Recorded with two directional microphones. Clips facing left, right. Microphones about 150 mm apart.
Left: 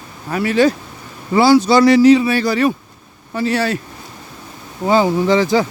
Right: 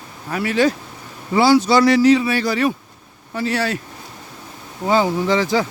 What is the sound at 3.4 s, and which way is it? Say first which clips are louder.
Speech: left 3 dB; 25° left (ahead or behind).